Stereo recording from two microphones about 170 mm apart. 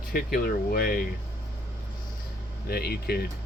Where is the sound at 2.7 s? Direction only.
65° left (ahead or behind).